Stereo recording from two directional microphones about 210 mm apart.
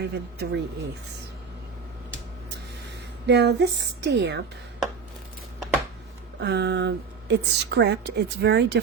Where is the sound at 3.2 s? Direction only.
55° right (ahead or behind).